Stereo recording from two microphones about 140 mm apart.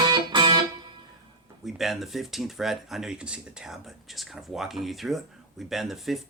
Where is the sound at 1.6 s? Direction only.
Centre (ahead or behind).